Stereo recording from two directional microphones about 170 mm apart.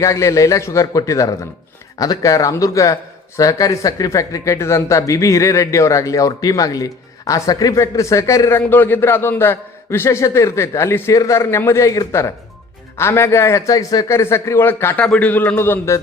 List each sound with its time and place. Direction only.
0.0 s a man's voice: 20° left (ahead or behind)